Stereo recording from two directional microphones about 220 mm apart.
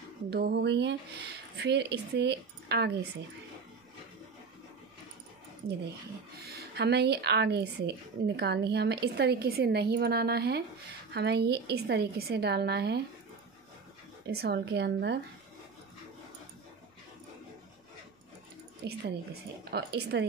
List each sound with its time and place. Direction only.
0.3 s speech: 45° right (ahead or behind)
6.4 s speech: 45° right (ahead or behind)
14.2 s speech: 45° right (ahead or behind)
18.8 s speech: 50° right (ahead or behind)